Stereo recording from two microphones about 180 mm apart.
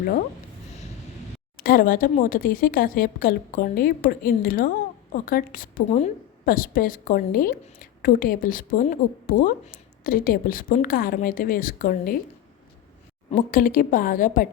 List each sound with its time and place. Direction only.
1.5 s a woman's voice: 55° left (ahead or behind)
13.3 s a woman's voice: 50° left (ahead or behind)